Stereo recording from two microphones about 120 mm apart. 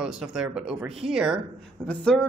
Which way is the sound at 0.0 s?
5° right (ahead or behind).